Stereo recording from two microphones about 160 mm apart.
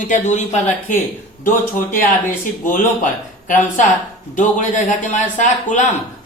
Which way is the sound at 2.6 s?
55° left (ahead or behind).